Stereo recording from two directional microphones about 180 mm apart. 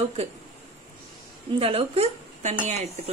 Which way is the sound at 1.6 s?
30° right (ahead or behind).